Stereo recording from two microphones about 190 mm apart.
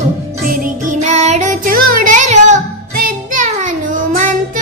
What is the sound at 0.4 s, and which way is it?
Music, 45° right (ahead or behind).